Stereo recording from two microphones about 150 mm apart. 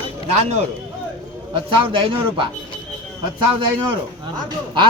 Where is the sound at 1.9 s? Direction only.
35° right (ahead or behind).